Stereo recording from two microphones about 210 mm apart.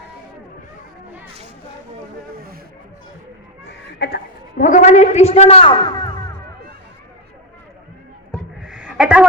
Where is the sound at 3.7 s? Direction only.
55° left (ahead or behind); by 6.3 s 20° left (ahead or behind).